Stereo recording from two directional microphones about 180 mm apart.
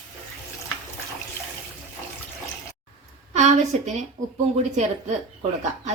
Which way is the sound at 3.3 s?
40° right (ahead or behind).